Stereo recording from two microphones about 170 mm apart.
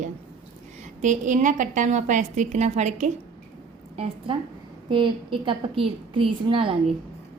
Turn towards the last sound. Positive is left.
turn(degrees=-30)  # may be behind; listen again after turning